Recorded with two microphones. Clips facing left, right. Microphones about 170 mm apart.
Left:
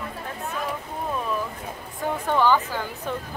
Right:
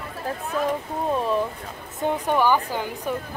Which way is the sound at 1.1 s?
30° right (ahead or behind).